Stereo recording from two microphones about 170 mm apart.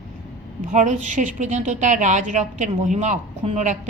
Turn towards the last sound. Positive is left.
turn(degrees=-45)  # may be behind; listen again after turning